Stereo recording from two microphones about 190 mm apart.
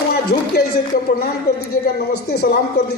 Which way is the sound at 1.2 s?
55° left (ahead or behind).